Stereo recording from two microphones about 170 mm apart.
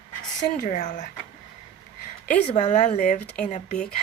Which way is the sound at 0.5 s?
50° left (ahead or behind).